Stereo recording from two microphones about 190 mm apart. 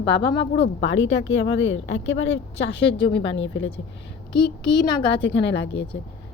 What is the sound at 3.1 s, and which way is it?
Speech, 80° left.